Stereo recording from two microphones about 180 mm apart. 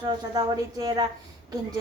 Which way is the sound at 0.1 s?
20° right (ahead or behind).